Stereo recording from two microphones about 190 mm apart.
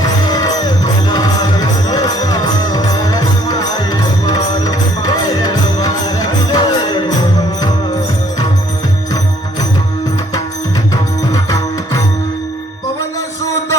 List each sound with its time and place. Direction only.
0.0 s music: 20° left (ahead or behind)
11.4 s music: 20° left (ahead or behind)